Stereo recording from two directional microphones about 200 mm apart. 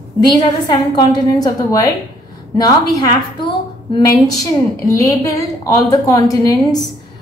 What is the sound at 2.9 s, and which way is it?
A woman's voice, 20° left (ahead or behind).